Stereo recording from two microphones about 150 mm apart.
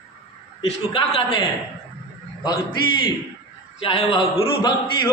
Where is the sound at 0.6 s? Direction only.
35° left (ahead or behind).